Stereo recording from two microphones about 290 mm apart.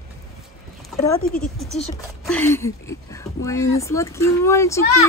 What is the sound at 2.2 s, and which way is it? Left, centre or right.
Speech, centre.